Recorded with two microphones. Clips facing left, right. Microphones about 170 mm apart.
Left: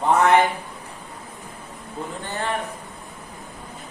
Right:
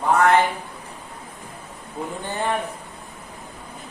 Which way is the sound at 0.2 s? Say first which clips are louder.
Even; 20° left (ahead or behind).